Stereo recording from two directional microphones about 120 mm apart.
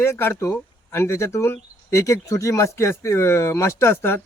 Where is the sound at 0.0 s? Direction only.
20° left (ahead or behind).